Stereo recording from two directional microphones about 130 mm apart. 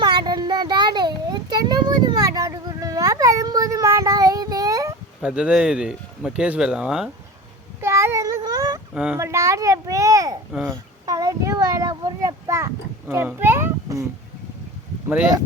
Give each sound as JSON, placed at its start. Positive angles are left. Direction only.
{"t": 0.0, "sound": "child singing", "side_deg": -35}
{"t": 5.2, "sound": "speech", "side_deg": -5}
{"t": 7.8, "sound": "child singing", "side_deg": -20}
{"t": 9.1, "sound": "a child's voice", "side_deg": -20}
{"t": 10.5, "sound": "a child's voice", "side_deg": -5}
{"t": 11.0, "sound": "a sound", "side_deg": -25}